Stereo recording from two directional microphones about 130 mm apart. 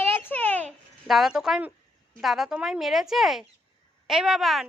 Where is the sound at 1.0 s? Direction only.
Centre (ahead or behind).